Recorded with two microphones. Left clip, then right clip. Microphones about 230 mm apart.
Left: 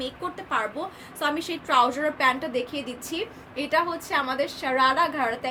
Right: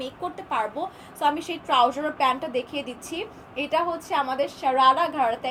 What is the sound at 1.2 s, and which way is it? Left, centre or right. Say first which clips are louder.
A woman's voice: right 3 dB; centre.